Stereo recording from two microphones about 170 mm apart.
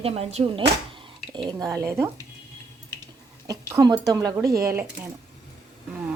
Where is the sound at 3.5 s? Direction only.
20° right (ahead or behind).